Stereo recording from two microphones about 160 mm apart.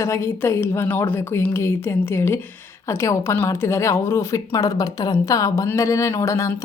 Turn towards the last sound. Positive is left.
turn(degrees=20)  # may be behind; listen again after turning